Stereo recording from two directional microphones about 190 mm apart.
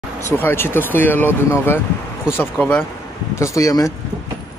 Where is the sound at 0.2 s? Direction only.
10° left (ahead or behind).